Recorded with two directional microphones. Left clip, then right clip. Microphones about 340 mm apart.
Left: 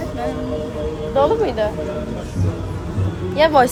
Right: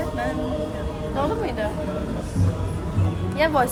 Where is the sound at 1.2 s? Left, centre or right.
Centre.